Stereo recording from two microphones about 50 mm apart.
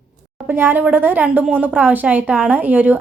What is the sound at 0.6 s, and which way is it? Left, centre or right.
A woman's voice, right.